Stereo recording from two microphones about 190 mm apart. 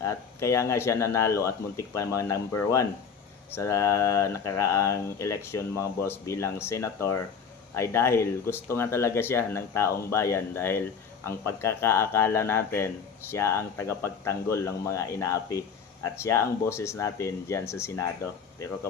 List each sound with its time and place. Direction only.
0.0 s speech: 15° left (ahead or behind)